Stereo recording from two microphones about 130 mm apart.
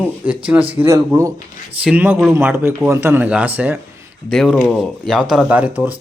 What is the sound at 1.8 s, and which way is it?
Speech, 15° right (ahead or behind).